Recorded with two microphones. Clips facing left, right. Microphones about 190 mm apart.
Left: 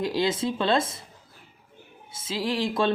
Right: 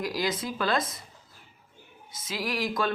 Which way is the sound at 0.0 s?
25° left (ahead or behind).